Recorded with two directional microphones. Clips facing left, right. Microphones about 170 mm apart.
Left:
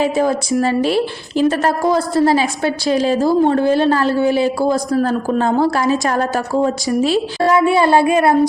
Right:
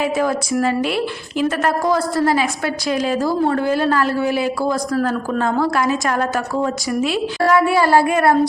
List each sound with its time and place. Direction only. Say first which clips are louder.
0.0 s a woman's voice: left 3 dB; 25° left (ahead or behind)